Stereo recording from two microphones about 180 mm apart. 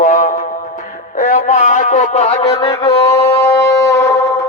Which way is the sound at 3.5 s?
15° left (ahead or behind).